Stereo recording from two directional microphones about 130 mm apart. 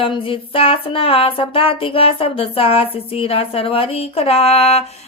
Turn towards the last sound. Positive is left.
turn(degrees=55)  # may be behind; listen again after turning